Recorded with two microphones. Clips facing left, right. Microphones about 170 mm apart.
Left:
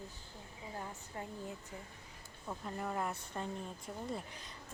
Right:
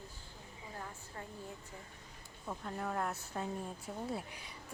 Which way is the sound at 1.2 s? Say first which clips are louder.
Left 4 dB; 20° left (ahead or behind).